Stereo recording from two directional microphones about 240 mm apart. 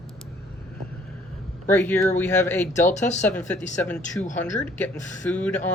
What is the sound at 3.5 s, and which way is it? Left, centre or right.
Speech, centre.